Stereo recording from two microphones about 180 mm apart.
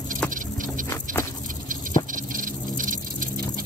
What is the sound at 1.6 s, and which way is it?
Patter, 50° right (ahead or behind).